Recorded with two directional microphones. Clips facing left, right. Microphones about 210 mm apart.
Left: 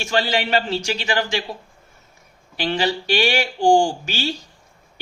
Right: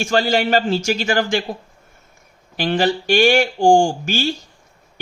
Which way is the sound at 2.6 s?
50° right (ahead or behind).